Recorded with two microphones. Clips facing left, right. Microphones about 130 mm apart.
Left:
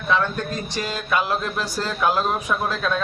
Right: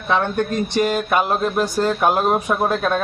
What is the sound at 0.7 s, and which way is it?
Speech, 55° right (ahead or behind).